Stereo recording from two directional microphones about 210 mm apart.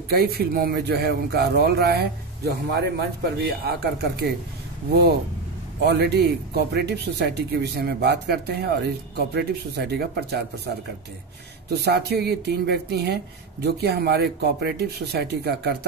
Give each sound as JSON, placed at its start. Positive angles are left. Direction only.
{"t": 0.1, "sound": "speech", "side_deg": -45}
{"t": 5.8, "sound": "speech", "side_deg": -50}
{"t": 11.7, "sound": "speech", "side_deg": -50}